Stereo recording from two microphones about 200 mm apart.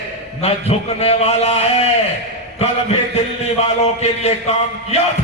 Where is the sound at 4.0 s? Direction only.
30° left (ahead or behind).